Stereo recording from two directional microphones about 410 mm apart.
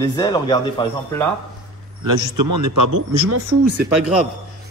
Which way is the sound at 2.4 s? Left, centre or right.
Right.